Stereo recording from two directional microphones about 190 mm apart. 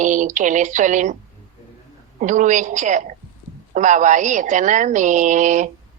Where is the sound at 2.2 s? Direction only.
40° right (ahead or behind).